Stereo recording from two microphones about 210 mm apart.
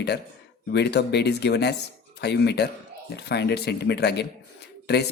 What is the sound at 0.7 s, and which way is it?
Speech, 55° left (ahead or behind).